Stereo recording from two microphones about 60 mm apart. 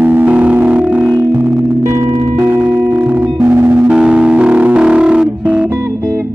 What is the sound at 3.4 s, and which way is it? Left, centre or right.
Music, right.